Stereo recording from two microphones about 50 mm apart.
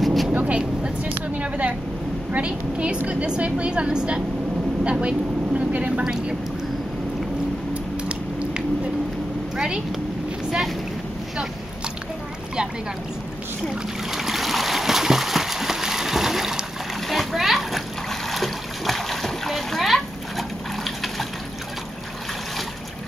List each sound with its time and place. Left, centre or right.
0.0 s vehicle: centre
0.3 s vehicle: right
0.6 s a woman's voice: right
7.7 s a sound: right
14.1 s a sound: centre
17.1 s splash: centre